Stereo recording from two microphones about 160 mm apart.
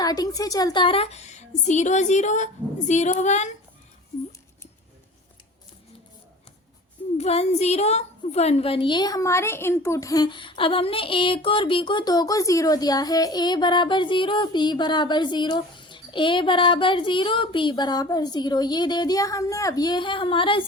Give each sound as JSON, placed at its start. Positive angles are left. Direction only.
{"t": 0.0, "sound": "a woman's voice", "side_deg": 25}
{"t": 7.2, "sound": "a woman's voice", "side_deg": 40}